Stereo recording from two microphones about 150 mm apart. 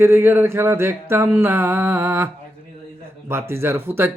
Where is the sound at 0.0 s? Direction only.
15° right (ahead or behind).